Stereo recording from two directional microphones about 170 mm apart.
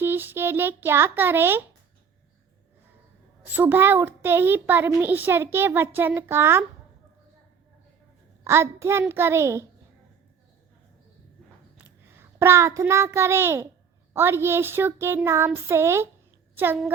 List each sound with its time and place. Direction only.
0.0 s speech: 10° right (ahead or behind)
3.4 s a child's voice: 10° right (ahead or behind)
8.4 s a child's voice: 15° right (ahead or behind)
11.8 s a child's voice: 15° right (ahead or behind)